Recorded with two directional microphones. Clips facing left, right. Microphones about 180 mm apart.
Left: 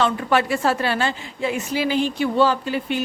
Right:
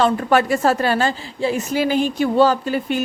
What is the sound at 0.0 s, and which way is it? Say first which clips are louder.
A woman's voice: right 3 dB; 45° right (ahead or behind).